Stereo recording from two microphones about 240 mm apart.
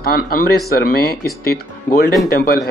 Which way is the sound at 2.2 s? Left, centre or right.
Left.